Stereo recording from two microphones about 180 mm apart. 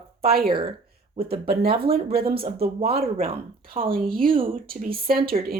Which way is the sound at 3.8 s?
55° right (ahead or behind).